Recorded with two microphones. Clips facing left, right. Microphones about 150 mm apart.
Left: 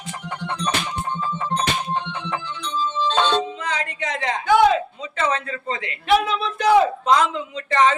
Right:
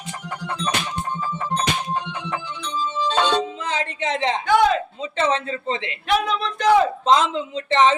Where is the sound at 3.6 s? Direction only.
25° right (ahead or behind).